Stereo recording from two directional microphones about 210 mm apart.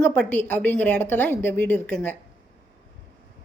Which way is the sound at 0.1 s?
10° left (ahead or behind).